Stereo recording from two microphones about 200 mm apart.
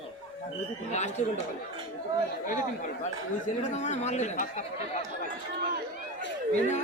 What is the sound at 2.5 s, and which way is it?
Speech, 40° left (ahead or behind).